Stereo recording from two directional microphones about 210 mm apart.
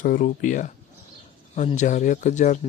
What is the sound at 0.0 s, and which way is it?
Speech, 40° left (ahead or behind).